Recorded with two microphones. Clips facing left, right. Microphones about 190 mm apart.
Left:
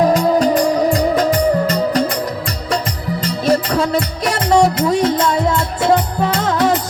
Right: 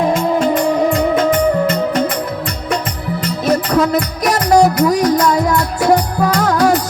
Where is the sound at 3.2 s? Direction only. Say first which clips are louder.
Even; 30° left (ahead or behind).